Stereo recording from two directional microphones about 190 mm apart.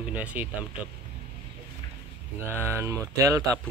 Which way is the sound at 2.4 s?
15° right (ahead or behind).